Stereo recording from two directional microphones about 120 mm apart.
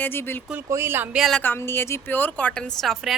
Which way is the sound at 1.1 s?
Centre (ahead or behind).